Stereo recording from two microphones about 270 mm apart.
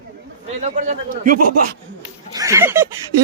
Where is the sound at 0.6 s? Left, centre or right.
Right.